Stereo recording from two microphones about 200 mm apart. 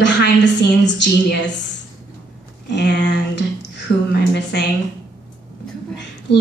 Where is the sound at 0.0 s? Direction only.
60° left (ahead or behind).